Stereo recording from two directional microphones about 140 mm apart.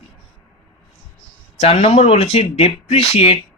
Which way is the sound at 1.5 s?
45° left (ahead or behind).